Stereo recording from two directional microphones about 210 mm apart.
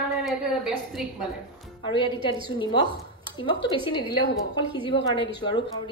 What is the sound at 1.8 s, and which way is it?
A woman's voice, 20° left (ahead or behind).